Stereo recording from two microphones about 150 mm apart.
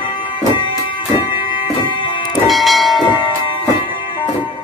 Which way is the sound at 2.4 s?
Centre (ahead or behind).